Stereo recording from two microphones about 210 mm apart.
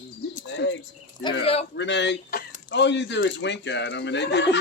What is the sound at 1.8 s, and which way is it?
Speech, 55° left (ahead or behind).